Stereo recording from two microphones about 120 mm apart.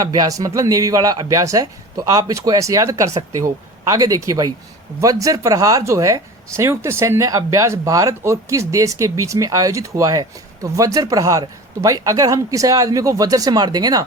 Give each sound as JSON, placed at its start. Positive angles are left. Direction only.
{"t": 0.0, "sound": "speech", "side_deg": -30}